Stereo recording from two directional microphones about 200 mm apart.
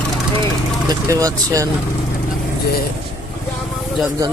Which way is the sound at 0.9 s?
15° right (ahead or behind).